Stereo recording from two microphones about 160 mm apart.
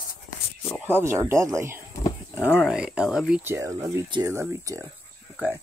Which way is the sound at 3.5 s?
20° right (ahead or behind).